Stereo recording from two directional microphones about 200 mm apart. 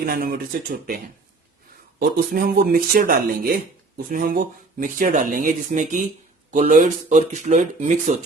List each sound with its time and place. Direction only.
0.0 s speech: 50° right (ahead or behind)